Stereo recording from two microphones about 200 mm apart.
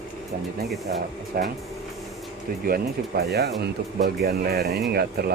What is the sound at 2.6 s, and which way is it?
Speech, 50° right (ahead or behind).